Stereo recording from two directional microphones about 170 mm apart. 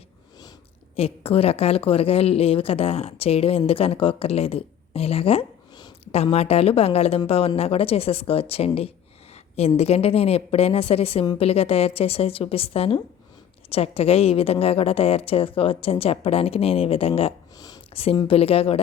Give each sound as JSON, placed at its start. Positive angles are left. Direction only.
{"t": 0.9, "sound": "a woman's voice", "side_deg": 35}